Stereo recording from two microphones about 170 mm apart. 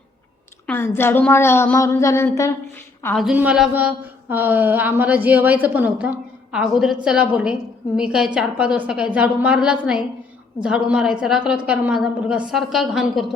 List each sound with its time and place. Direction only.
0.7 s a woman's voice: 15° left (ahead or behind)
3.2 s a woman's voice: 5° right (ahead or behind)